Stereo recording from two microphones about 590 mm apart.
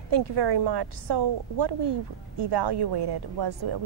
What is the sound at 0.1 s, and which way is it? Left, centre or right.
A woman's voice, right.